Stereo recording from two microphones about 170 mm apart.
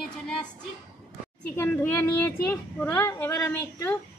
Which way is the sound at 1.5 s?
15° left (ahead or behind).